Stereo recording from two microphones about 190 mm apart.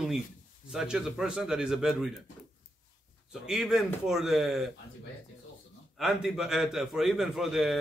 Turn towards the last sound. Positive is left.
turn(degrees=0)  # may be behind; listen again after turning